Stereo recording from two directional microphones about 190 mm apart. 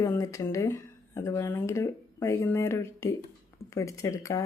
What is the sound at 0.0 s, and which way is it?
Speech, 15° left (ahead or behind).